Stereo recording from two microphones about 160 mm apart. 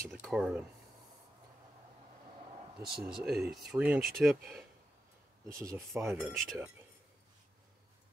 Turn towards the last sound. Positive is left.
turn(degrees=0)  # may be behind; listen again after turning